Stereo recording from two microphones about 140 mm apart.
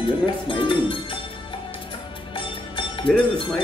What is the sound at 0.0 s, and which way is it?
Speech, 35° left (ahead or behind).